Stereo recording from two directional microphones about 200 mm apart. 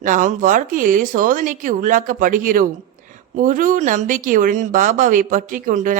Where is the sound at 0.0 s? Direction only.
40° right (ahead or behind).